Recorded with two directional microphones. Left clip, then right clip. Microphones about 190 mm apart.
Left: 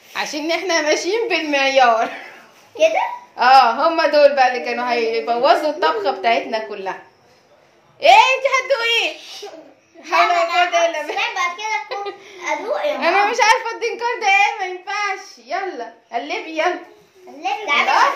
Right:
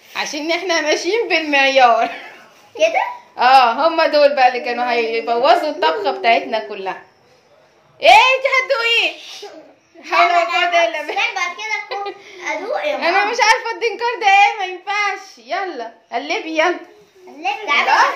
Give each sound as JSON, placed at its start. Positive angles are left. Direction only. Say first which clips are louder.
{"t": 0.1, "sound": "a child's voice", "louder": "right 1 dB", "side_deg": 0}
{"t": 8.0, "sound": "a child's voice", "louder": "right 1 dB", "side_deg": -20}
{"t": 13.0, "sound": "a woman's voice", "louder": "even", "side_deg": 5}
{"t": 13.7, "sound": "a child's voice", "louder": "right 2 dB", "side_deg": -15}